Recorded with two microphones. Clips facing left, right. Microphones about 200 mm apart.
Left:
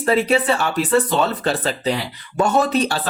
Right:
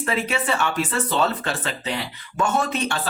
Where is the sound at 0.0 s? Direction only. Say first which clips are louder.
Left 7 dB; 35° left (ahead or behind).